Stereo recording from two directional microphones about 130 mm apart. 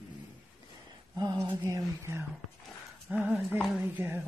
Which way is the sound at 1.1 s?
30° right (ahead or behind).